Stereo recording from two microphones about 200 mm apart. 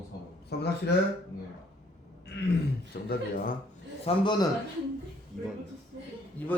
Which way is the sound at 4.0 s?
25° left (ahead or behind).